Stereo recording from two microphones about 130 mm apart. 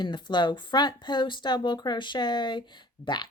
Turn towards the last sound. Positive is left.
turn(degrees=35)  # may be behind; listen again after turning